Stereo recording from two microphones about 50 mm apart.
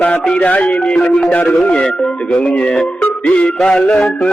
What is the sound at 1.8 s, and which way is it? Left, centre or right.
Music, centre.